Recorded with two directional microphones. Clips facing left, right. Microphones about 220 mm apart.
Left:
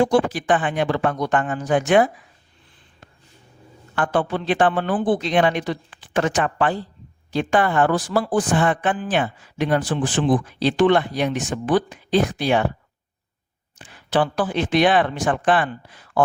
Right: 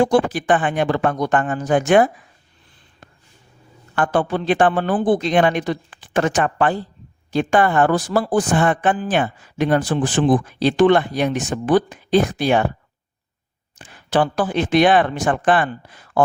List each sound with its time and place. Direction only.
0.0 s a woman's voice: 50° right (ahead or behind)
3.9 s a woman's voice: 45° right (ahead or behind)
13.7 s a woman's voice: 45° right (ahead or behind)